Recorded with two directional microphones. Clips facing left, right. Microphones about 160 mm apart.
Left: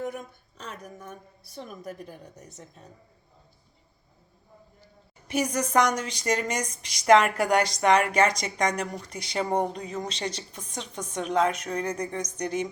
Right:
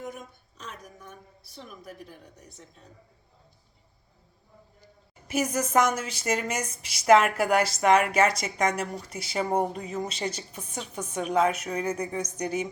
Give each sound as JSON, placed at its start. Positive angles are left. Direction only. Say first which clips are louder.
{"t": 1.5, "sound": "a woman's voice", "louder": "left 5 dB", "side_deg": 50}
{"t": 5.3, "sound": "a woman's voice", "louder": "even", "side_deg": -5}